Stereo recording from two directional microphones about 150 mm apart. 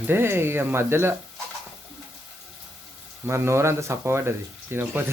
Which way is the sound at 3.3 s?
15° right (ahead or behind).